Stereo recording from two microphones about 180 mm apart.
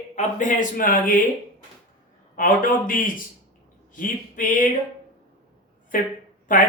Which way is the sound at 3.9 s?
45° left (ahead or behind).